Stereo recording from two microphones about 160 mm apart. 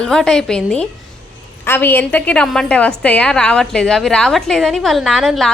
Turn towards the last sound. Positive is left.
turn(degrees=0)  # may be behind; listen again after turning